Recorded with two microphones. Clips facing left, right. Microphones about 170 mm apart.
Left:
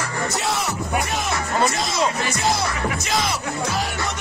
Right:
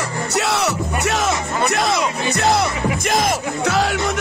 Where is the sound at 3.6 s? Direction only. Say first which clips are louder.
Right 9 dB; 90° right.